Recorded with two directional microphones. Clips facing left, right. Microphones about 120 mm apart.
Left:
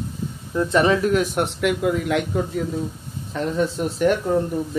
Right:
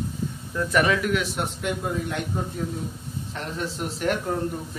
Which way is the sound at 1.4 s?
90° left.